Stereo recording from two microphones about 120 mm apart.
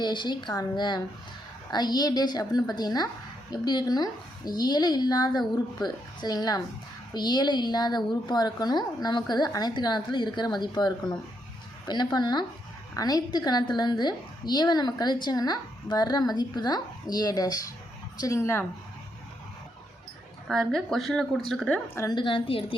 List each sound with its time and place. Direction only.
0.0 s a woman's voice: 40° left (ahead or behind); by 18.6 s 20° left (ahead or behind)
20.5 s speech: 5° left (ahead or behind)
21.7 s a woman's voice: 25° left (ahead or behind)
22.1 s a woman's voice: 45° left (ahead or behind)